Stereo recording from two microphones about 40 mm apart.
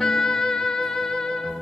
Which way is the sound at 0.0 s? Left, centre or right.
Centre.